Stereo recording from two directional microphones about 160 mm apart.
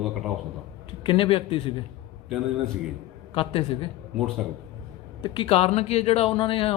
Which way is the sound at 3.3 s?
35° left (ahead or behind).